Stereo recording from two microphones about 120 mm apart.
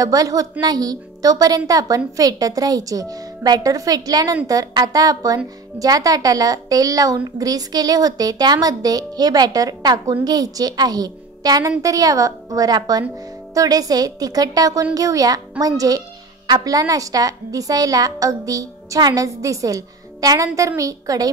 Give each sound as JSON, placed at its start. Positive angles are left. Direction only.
{"t": 0.0, "sound": "a woman's voice", "side_deg": -30}